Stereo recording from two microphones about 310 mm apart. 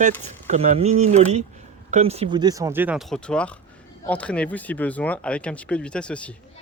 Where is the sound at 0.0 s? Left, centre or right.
Right.